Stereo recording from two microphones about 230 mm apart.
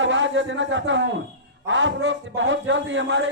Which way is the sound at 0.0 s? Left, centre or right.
Right.